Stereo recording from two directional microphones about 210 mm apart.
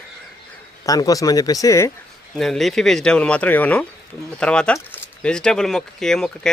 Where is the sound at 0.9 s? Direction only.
15° left (ahead or behind).